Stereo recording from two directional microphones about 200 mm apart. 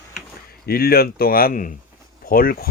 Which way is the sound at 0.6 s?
50° left (ahead or behind).